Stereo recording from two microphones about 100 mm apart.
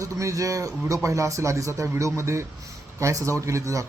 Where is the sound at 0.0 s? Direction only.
30° right (ahead or behind).